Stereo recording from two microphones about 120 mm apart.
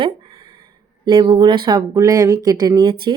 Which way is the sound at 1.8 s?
30° right (ahead or behind).